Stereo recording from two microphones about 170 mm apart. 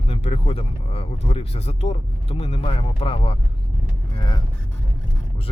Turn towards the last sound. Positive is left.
turn(degrees=25)  # may be behind; listen again after turning